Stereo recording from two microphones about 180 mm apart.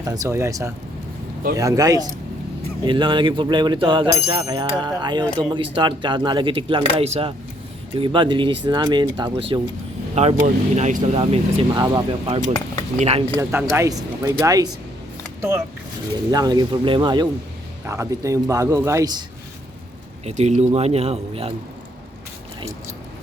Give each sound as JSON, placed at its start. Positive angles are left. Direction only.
{"t": 0.0, "sound": "a man's voice", "side_deg": -20}
{"t": 11.7, "sound": "a man's voice", "side_deg": -25}
{"t": 13.3, "sound": "a man's voice", "side_deg": -15}
{"t": 17.8, "sound": "a man's voice", "side_deg": -15}
{"t": 20.2, "sound": "a man's voice", "side_deg": -40}